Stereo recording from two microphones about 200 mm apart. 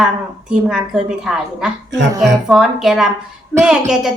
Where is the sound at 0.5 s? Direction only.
5° right (ahead or behind).